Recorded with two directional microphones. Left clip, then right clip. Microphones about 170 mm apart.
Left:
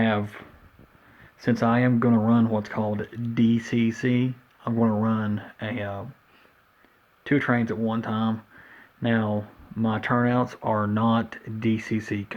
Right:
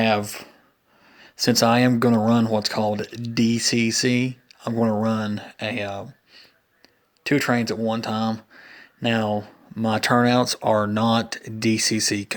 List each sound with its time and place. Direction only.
1.4 s speech: 50° right (ahead or behind)
7.5 s speech: 45° right (ahead or behind)
9.9 s speech: 50° right (ahead or behind)